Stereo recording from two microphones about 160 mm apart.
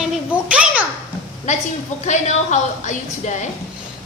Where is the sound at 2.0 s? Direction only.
50° left (ahead or behind).